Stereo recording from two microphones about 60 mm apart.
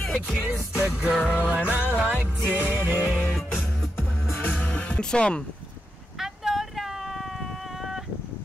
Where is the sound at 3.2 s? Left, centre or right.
Centre.